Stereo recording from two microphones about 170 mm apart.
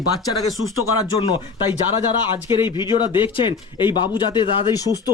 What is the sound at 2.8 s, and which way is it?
A man's voice, 25° left (ahead or behind).